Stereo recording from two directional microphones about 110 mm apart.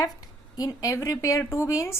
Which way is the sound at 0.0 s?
35° left (ahead or behind).